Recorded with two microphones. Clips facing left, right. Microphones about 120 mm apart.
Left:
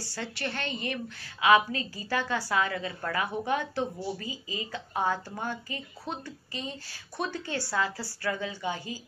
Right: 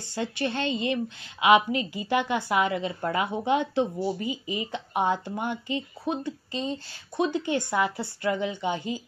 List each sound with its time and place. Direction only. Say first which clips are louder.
0.0 s a woman's voice: right 6 dB; 20° right (ahead or behind)